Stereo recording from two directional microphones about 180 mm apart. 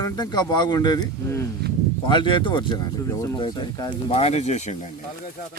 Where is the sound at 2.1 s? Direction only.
25° left (ahead or behind).